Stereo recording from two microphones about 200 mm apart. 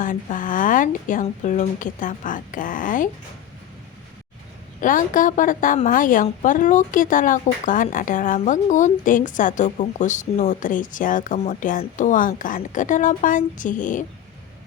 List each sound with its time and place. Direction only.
0.0 s a woman's voice: 40° left (ahead or behind)
4.8 s a woman's voice: 40° left (ahead or behind)